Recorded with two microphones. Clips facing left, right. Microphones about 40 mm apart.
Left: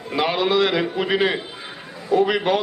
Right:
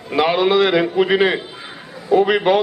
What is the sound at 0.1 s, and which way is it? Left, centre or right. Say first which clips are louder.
A man's voice: right 5 dB; right.